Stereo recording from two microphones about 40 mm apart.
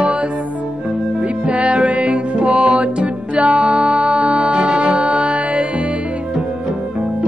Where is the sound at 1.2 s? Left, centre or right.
Right.